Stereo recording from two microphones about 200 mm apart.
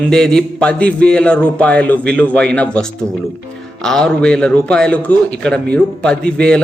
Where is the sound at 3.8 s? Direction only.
5° left (ahead or behind).